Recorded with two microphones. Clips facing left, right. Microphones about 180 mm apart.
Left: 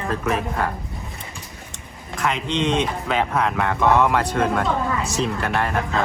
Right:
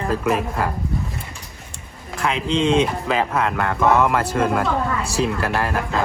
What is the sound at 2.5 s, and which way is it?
Speech, 30° right (ahead or behind).